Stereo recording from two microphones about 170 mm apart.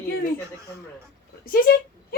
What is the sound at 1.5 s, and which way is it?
Speech, 60° left (ahead or behind).